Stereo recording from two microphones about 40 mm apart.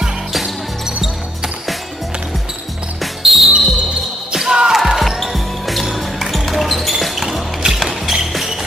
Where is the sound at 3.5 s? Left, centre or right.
Right.